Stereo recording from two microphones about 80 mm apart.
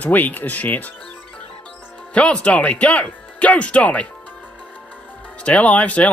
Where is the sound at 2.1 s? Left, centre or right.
Centre.